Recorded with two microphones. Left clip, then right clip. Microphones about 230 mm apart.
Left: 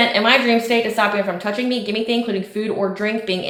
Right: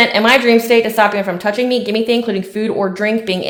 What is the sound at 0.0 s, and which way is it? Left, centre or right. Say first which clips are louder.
A woman's voice: right 4 dB; right.